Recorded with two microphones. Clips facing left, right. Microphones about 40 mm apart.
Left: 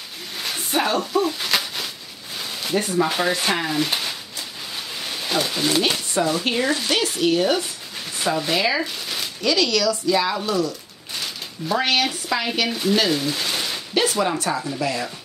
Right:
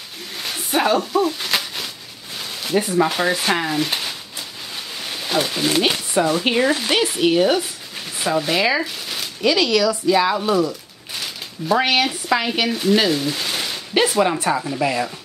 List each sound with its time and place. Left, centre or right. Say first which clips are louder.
0.4 s a sound: right 3 dB; centre
3.1 s speech: right 2 dB; centre
9.4 s speech: right 3 dB; centre
11.1 s speech: right 1 dB; centre
12.4 s speech: right 2 dB; centre
13.1 s a sound: right 1 dB; centre
13.9 s speech: right 4 dB; centre